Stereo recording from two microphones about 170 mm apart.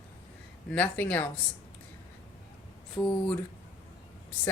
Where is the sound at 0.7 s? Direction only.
10° left (ahead or behind).